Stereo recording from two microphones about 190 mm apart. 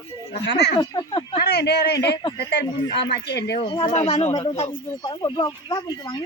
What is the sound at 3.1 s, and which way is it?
Speech, 60° left (ahead or behind).